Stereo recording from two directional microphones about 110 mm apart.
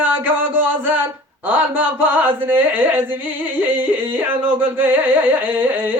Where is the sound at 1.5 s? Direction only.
15° right (ahead or behind).